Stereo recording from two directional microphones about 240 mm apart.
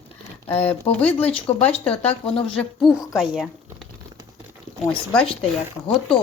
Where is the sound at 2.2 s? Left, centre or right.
Left.